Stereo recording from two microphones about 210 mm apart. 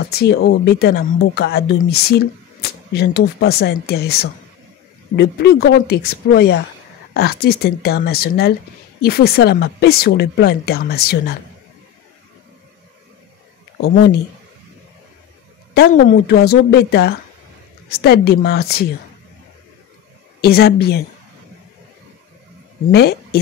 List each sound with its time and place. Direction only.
0.0 s speech: 50° left (ahead or behind)
13.7 s speech: 50° left (ahead or behind)
15.7 s speech: 50° left (ahead or behind)
20.3 s speech: 45° left (ahead or behind)
22.8 s speech: 50° left (ahead or behind)